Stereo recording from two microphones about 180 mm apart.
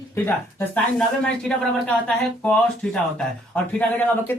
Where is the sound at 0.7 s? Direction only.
5° left (ahead or behind).